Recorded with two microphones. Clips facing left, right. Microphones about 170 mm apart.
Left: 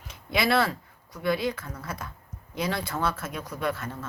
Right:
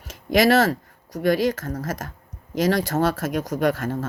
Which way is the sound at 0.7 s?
80° right.